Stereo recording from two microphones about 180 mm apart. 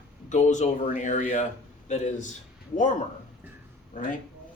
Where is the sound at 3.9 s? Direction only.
45° left (ahead or behind).